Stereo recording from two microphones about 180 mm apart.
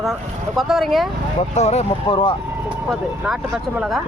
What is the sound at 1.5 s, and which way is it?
Speech, 40° left (ahead or behind).